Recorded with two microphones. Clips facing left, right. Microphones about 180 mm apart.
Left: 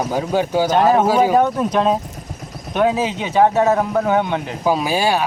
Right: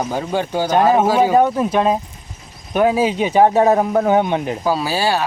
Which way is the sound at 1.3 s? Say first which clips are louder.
Right 1 dB; 5° right (ahead or behind).